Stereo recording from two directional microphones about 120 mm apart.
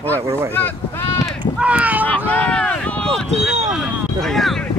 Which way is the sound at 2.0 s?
15° left (ahead or behind).